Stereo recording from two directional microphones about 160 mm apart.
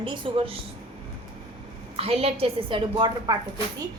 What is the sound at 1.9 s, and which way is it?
A woman's voice, 40° right (ahead or behind).